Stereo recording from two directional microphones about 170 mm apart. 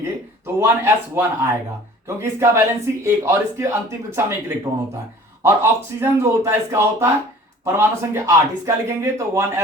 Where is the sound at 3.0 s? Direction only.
15° right (ahead or behind).